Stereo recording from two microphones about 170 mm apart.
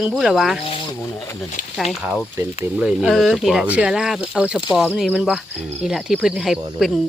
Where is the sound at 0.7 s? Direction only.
30° left (ahead or behind).